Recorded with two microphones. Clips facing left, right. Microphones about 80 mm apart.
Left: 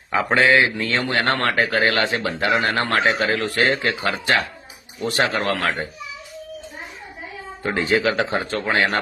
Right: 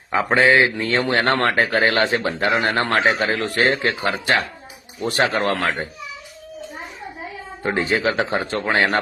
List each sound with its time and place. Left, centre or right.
0.3 s a man's voice: right
7.6 s a man's voice: right